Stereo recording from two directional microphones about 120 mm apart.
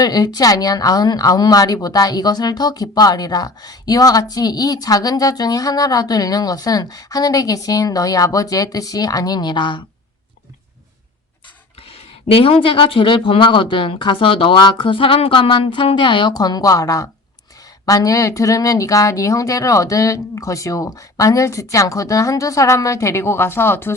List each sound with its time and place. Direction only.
0.0 s a woman's voice: 35° left (ahead or behind)
11.8 s speech: 50° left (ahead or behind); by 23.9 s 20° left (ahead or behind)